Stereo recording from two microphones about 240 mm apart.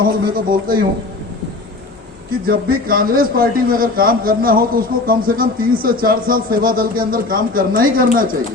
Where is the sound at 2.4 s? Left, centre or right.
Right.